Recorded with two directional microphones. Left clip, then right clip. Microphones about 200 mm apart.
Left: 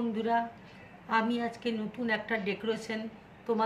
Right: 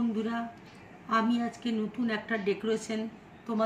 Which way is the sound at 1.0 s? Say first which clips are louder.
Right 1 dB; 55° left (ahead or behind).